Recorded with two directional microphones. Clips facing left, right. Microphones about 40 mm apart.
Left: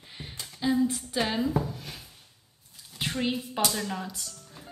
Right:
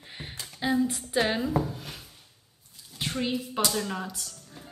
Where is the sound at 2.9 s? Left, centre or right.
Centre.